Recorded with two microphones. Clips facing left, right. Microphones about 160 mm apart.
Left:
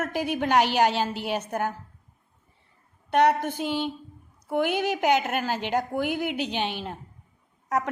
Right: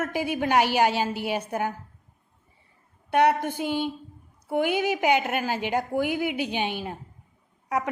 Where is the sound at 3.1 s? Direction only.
10° right (ahead or behind).